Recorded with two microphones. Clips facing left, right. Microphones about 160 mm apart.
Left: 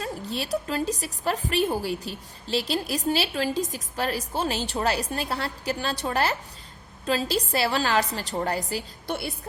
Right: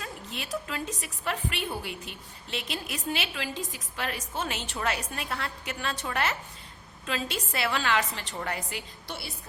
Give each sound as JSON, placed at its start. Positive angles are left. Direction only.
{"t": 0.0, "sound": "a woman's voice", "side_deg": 35}
{"t": 9.0, "sound": "a woman's voice", "side_deg": 55}